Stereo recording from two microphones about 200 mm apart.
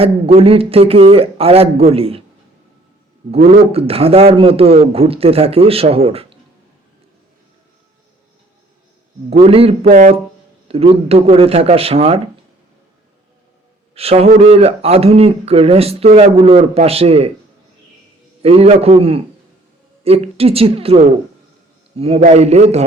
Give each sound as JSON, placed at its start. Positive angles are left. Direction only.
{"t": 0.0, "sound": "speech", "side_deg": -30}
{"t": 3.3, "sound": "speech", "side_deg": -30}
{"t": 9.3, "sound": "speech", "side_deg": -30}
{"t": 13.9, "sound": "speech", "side_deg": -30}
{"t": 18.4, "sound": "speech", "side_deg": -30}